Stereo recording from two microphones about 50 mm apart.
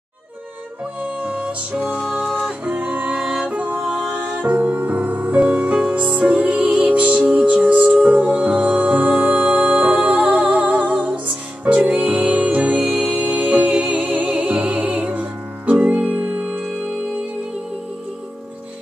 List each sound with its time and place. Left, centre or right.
1.0 s music: right
3.1 s music: centre